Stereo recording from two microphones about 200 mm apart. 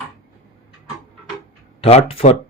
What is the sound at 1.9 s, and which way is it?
Speech, 30° left (ahead or behind).